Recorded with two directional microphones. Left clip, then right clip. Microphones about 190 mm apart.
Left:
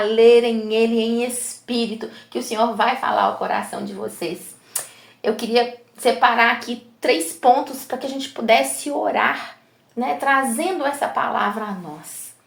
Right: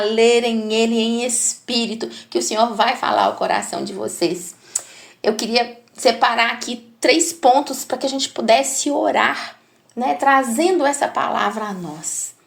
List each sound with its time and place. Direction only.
0.0 s speech: 35° right (ahead or behind)
4.7 s a sound: 35° right (ahead or behind)
5.2 s speech: 35° right (ahead or behind)